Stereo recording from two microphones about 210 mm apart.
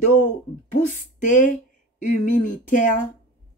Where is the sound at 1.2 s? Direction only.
35° left (ahead or behind).